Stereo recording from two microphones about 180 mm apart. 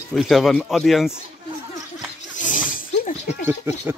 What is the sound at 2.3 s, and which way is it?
Roaring cats, 45° left (ahead or behind).